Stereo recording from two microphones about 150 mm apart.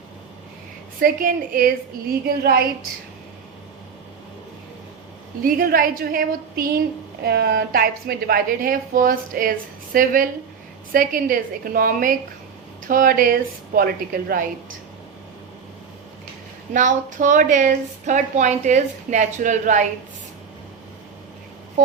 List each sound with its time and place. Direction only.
0.9 s a woman's voice: 70° right (ahead or behind); by 2.6 s 90° right
5.4 s a woman's voice: 75° right (ahead or behind)
16.7 s a woman's voice: 55° right (ahead or behind)